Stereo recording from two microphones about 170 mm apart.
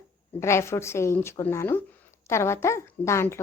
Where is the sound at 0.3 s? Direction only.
15° left (ahead or behind).